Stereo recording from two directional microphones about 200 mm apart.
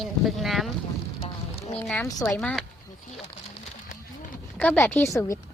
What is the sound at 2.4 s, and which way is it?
Speech, centre (ahead or behind).